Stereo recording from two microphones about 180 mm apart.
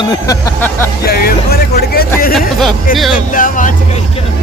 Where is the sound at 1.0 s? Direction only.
55° left (ahead or behind).